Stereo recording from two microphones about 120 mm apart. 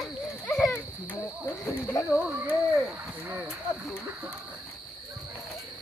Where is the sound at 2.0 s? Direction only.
30° left (ahead or behind).